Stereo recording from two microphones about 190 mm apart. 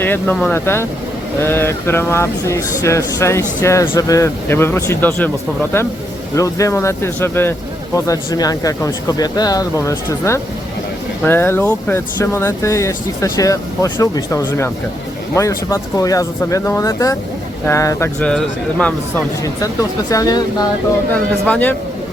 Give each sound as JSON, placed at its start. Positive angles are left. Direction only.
{"t": 0.0, "sound": "speech", "side_deg": 10}
{"t": 19.6, "sound": "speech", "side_deg": 20}
{"t": 21.4, "sound": "speech", "side_deg": 10}